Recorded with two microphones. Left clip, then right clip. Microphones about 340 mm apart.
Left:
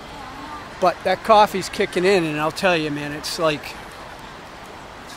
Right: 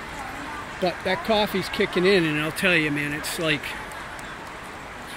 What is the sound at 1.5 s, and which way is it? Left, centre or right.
Speech, centre.